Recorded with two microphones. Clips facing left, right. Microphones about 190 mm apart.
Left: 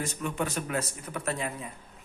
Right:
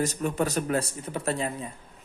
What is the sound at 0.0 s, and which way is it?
Speech, 40° right (ahead or behind).